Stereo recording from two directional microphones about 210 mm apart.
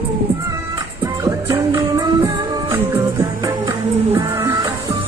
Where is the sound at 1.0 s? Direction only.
15° right (ahead or behind).